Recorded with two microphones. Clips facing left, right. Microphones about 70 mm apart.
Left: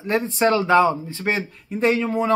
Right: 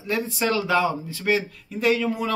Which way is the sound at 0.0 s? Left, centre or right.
Left.